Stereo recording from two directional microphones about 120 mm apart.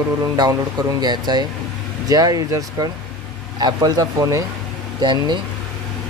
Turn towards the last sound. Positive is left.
turn(degrees=-40)  # may be behind; listen again after turning